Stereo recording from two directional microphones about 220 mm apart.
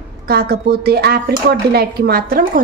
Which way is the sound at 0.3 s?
45° right (ahead or behind).